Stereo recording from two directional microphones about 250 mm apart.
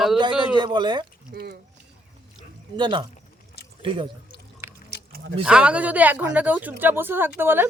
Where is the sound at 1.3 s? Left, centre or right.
Right.